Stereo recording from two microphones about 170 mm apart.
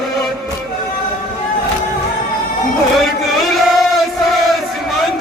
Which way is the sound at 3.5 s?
Centre (ahead or behind).